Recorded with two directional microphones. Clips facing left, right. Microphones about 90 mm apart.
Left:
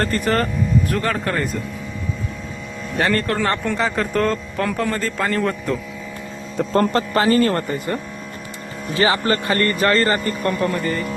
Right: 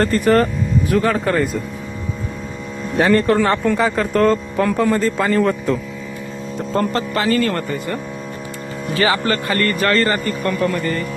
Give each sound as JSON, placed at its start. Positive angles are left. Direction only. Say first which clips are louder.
{"t": 0.0, "sound": "a man's voice", "louder": "right 5 dB", "side_deg": 0}
{"t": 2.9, "sound": "a man's voice", "louder": "right 6 dB", "side_deg": -5}
{"t": 6.7, "sound": "speech", "louder": "left 2 dB", "side_deg": 35}
{"t": 9.0, "sound": "a man's voice", "louder": "even", "side_deg": 25}